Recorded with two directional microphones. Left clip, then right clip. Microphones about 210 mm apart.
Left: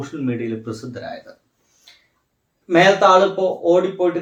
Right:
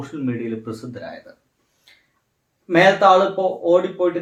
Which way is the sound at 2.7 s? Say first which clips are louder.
Left 1 dB; 5° right (ahead or behind).